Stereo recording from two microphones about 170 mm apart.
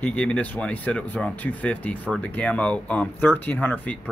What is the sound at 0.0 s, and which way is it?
Speech, 5° left (ahead or behind).